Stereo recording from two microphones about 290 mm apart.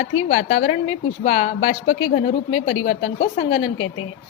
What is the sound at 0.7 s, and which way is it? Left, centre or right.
Speech, left.